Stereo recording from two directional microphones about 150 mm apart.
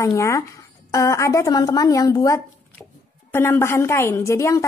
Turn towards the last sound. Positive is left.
turn(degrees=20)  # may be behind; listen again after turning